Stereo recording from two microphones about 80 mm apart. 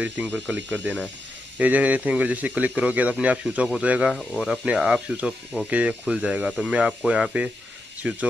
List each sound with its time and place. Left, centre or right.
0.0 s a man's voice: centre